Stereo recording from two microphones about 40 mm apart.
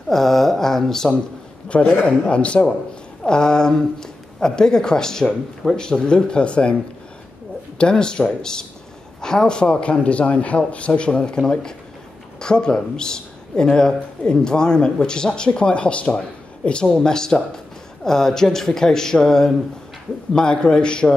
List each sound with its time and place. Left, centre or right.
0.1 s speech: centre
2.0 s speech: left
3.3 s a man's voice: centre; by 10.9 s left
10.9 s speech: left